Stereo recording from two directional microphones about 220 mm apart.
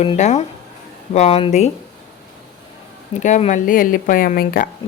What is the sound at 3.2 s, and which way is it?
Speech, 35° left (ahead or behind).